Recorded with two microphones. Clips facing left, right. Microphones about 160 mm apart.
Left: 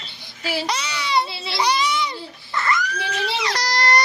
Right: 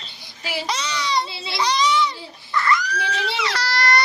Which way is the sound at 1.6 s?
10° left (ahead or behind).